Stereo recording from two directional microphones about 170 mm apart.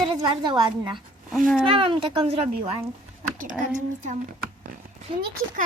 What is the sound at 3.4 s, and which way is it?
Speech, 50° right (ahead or behind).